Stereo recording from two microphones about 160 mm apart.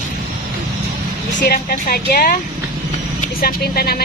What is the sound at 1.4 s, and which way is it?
Speech, 70° left (ahead or behind).